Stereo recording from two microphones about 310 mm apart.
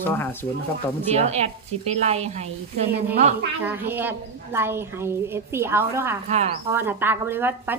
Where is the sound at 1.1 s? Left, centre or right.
Right.